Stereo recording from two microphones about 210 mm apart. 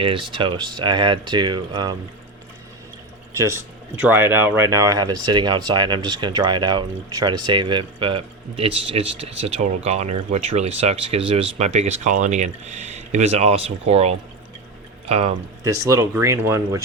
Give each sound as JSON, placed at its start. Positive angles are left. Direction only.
{"t": 0.0, "sound": "speech", "side_deg": -25}
{"t": 3.3, "sound": "speech", "side_deg": -15}
{"t": 15.6, "sound": "speech", "side_deg": -15}